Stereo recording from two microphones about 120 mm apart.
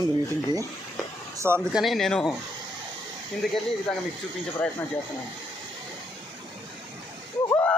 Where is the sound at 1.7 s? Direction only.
Centre (ahead or behind).